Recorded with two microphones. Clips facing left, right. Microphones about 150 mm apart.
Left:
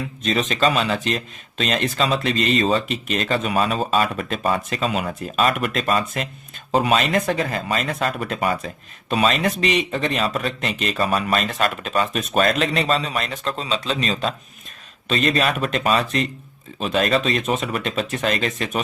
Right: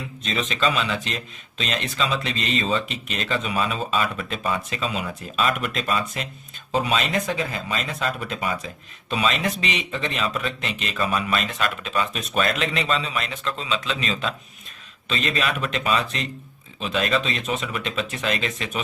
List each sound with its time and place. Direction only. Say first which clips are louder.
0.2 s speech: left 5 dB; 45° left (ahead or behind)